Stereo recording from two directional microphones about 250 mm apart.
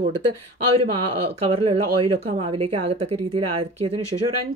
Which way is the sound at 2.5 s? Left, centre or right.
Right.